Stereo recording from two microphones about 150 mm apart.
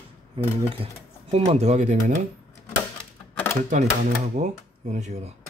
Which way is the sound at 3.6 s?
50° right (ahead or behind).